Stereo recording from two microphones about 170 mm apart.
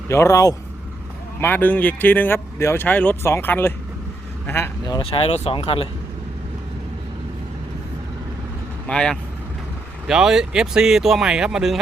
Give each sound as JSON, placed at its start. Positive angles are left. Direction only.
{"t": 0.1, "sound": "speech", "side_deg": 15}
{"t": 4.9, "sound": "speech", "side_deg": 35}
{"t": 8.9, "sound": "speech", "side_deg": 5}